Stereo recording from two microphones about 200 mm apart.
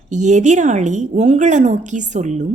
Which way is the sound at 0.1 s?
35° right (ahead or behind).